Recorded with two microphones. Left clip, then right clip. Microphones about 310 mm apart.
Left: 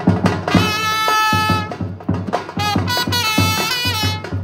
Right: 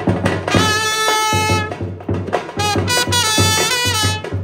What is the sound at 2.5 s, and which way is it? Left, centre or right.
Music, left.